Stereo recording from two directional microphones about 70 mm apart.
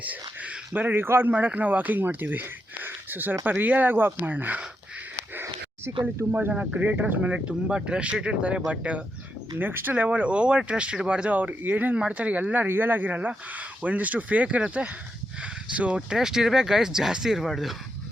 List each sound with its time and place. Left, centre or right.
0.0 s speech: right
1.3 s speech: right
9.6 s speech: right
12.6 s speech: right; by 17.7 s centre